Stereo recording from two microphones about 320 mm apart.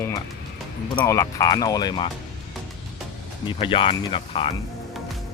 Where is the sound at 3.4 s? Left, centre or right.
Centre.